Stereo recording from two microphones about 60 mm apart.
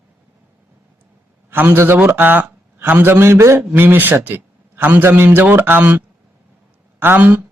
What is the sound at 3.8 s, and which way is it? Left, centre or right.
Speech, right.